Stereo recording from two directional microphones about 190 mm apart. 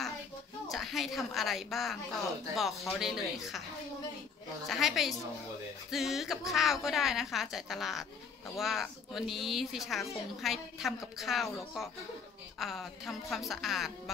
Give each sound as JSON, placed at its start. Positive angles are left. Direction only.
{"t": 0.7, "sound": "speech", "side_deg": 0}
{"t": 4.6, "sound": "speech", "side_deg": 0}